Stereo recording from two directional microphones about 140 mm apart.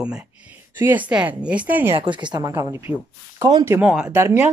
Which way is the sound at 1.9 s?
35° right (ahead or behind).